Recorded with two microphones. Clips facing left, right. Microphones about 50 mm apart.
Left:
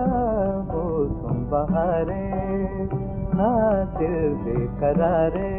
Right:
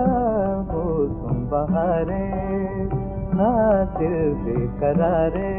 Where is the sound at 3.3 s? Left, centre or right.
Centre.